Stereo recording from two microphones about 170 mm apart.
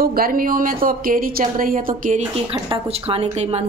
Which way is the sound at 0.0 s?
60° right (ahead or behind).